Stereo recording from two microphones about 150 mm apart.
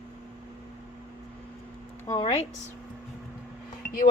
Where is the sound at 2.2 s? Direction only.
40° left (ahead or behind).